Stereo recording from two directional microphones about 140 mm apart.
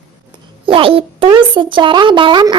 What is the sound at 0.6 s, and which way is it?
Speech, 40° right (ahead or behind).